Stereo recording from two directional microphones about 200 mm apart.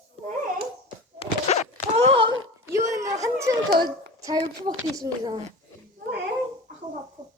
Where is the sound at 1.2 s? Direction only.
35° left (ahead or behind).